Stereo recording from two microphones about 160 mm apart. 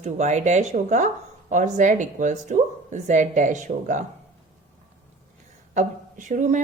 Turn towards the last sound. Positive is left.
turn(degrees=-50)  # may be behind; listen again after turning